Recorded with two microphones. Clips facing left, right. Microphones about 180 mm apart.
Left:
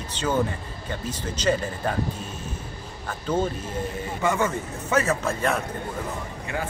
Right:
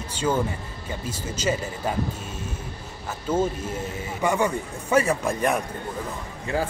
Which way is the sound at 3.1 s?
5° right (ahead or behind).